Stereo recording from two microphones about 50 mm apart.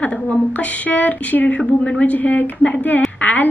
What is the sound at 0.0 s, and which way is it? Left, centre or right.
Speech, left.